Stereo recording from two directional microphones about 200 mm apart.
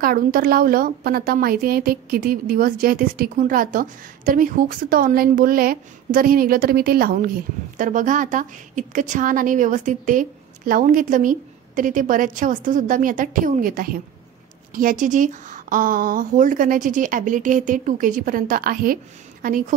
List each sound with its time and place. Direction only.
0.0 s a woman's voice: 45° right (ahead or behind)